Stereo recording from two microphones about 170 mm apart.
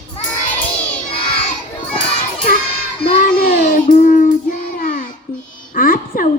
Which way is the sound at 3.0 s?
55° left (ahead or behind).